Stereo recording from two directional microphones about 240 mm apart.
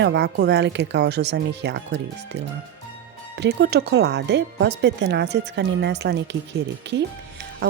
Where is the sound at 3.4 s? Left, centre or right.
Right.